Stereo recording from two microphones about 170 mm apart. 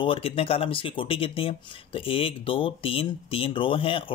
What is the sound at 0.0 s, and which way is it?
Speech, 35° left (ahead or behind).